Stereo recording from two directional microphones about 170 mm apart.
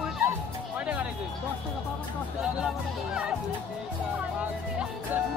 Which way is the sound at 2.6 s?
5° right (ahead or behind).